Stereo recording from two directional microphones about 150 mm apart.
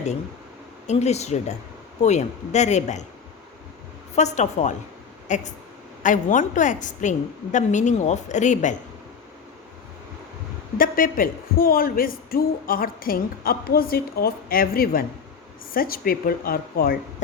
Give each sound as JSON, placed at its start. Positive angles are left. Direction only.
{"t": 0.9, "sound": "speech", "side_deg": 45}
{"t": 4.1, "sound": "a woman's voice", "side_deg": 50}
{"t": 10.8, "sound": "a woman's voice", "side_deg": 70}